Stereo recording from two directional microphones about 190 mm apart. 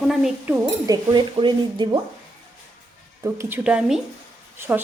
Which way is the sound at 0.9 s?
25° right (ahead or behind).